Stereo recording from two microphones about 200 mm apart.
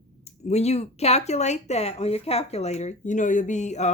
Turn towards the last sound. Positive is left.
turn(degrees=35)  # may be behind; listen again after turning